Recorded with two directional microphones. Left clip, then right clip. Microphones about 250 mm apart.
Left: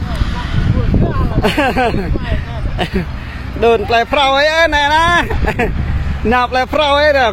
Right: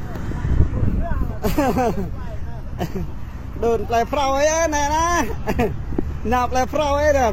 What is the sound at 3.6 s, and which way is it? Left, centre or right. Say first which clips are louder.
Speech: left 8 dB; centre.